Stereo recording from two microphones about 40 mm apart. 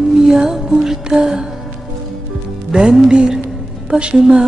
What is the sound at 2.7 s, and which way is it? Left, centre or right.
Music, centre.